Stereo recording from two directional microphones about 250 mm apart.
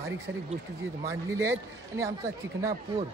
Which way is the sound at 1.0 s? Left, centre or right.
Centre.